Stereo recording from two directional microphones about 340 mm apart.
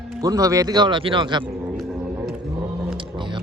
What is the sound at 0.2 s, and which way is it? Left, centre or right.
Speech, centre.